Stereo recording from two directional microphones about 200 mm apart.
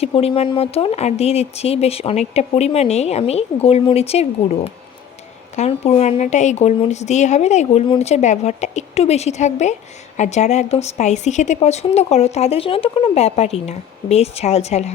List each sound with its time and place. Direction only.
0.0 s speech: 30° left (ahead or behind)